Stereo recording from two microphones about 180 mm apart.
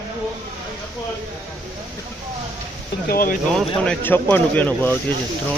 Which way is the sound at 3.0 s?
55° left (ahead or behind).